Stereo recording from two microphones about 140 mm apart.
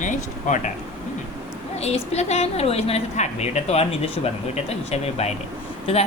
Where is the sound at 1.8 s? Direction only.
50° left (ahead or behind).